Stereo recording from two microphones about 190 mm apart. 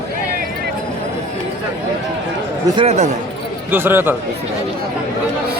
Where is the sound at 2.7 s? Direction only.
25° right (ahead or behind).